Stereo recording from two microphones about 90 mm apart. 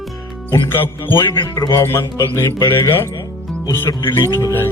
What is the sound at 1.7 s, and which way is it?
Music, 30° left (ahead or behind).